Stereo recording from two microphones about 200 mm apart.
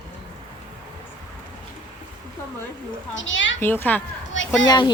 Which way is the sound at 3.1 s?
70° left (ahead or behind).